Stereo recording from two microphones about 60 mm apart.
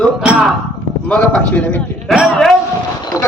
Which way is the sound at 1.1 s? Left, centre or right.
Centre.